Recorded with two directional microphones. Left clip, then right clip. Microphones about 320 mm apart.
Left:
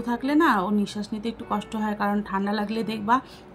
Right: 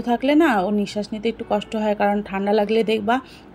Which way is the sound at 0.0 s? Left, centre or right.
Centre.